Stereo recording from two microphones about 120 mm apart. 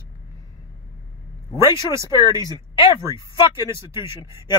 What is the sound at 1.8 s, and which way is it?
Speech, 25° right (ahead or behind).